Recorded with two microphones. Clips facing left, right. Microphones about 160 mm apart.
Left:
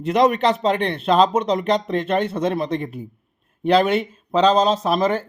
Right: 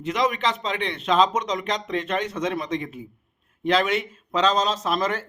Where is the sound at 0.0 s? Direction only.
40° left (ahead or behind).